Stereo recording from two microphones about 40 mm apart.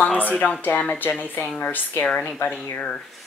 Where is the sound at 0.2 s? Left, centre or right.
Left.